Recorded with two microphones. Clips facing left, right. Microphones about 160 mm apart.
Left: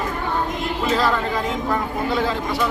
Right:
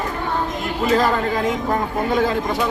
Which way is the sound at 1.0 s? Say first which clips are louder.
Right 2 dB; 45° right (ahead or behind).